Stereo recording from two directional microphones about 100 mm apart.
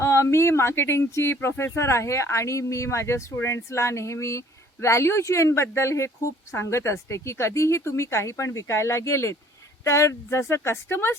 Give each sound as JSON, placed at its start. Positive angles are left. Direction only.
{"t": 0.0, "sound": "speech", "side_deg": 25}